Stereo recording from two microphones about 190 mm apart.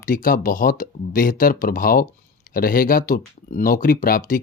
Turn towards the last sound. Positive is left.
turn(degrees=50)  # may be behind; listen again after turning